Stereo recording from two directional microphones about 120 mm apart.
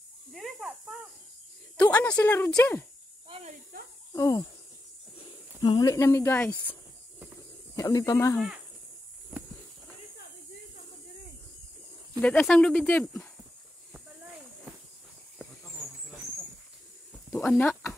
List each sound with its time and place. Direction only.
0.3 s snake: centre (ahead or behind)
1.8 s speech: 10° left (ahead or behind)
4.1 s a sound: 30° left (ahead or behind)
5.6 s speech: 35° left (ahead or behind); by 6.8 s 15° left (ahead or behind)
7.7 s speech: 30° left (ahead or behind)
12.2 s speech: 10° left (ahead or behind)
17.5 s speech: 15° left (ahead or behind)